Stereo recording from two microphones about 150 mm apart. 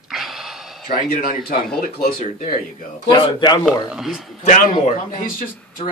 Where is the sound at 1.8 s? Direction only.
80° left.